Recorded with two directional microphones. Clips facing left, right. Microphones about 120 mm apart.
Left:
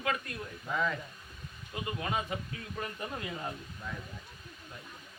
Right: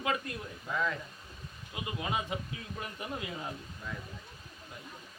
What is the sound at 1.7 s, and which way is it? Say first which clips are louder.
Speech: left 1 dB; 15° right (ahead or behind).